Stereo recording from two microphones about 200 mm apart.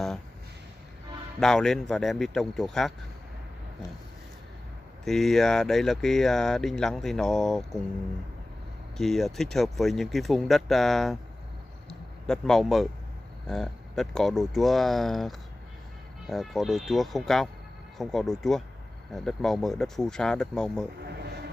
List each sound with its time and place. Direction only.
1.4 s speech: centre (ahead or behind)
5.0 s speech: centre (ahead or behind)
8.9 s speech: centre (ahead or behind)
11.9 s a sound: centre (ahead or behind)
13.5 s speech: centre (ahead or behind)
21.0 s a sound: 55° right (ahead or behind)